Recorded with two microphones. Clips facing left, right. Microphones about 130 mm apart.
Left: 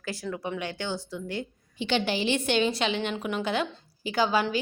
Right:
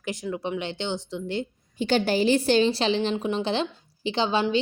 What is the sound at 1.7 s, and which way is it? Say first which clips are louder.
A woman's voice: right 5 dB; 40° right (ahead or behind).